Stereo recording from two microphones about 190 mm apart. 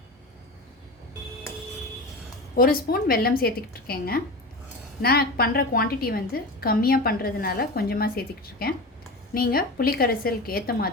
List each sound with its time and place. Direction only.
2.6 s a woman's voice: 50° left (ahead or behind)